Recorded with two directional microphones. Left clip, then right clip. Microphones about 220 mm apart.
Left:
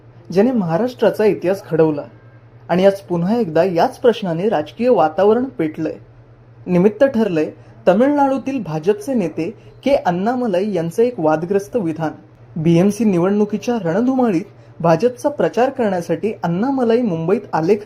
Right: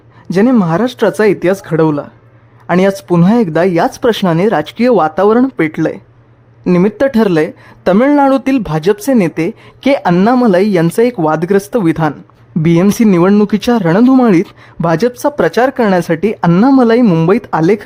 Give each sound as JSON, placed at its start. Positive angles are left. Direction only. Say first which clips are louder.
{"t": 0.3, "sound": "speech", "louder": "right 5 dB", "side_deg": -30}
{"t": 10.2, "sound": "speech", "louder": "right 9 dB", "side_deg": -45}